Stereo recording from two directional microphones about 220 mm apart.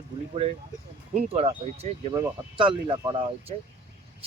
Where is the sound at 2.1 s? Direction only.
20° right (ahead or behind).